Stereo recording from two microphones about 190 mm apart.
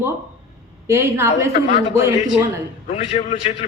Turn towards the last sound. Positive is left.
turn(degrees=35)  # may be behind; listen again after turning